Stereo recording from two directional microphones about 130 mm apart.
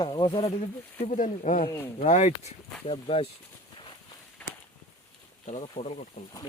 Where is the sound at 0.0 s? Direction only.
35° left (ahead or behind).